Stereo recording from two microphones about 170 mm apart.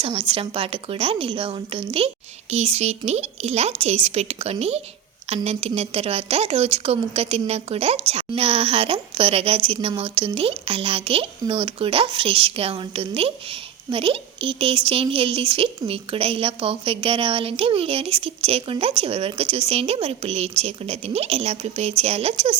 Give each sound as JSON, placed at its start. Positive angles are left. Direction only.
{"t": 0.0, "sound": "a woman's voice", "side_deg": -35}